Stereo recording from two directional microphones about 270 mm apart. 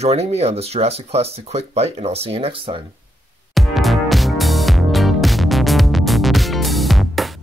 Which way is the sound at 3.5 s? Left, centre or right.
Centre.